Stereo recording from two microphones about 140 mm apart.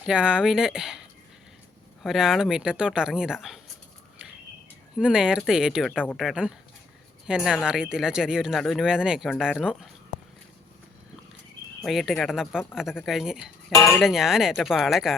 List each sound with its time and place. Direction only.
0.0 s speech: 5° right (ahead or behind)
2.0 s speech: 5° right (ahead or behind)
4.9 s speech: 5° right (ahead or behind)
11.8 s speech: centre (ahead or behind)
13.7 s speech: 20° left (ahead or behind)
14.0 s speech: 5° right (ahead or behind)